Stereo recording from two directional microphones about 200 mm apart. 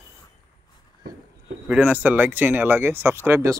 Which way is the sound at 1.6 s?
10° right (ahead or behind).